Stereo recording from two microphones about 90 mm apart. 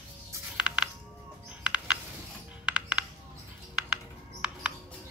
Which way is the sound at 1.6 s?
15° right (ahead or behind).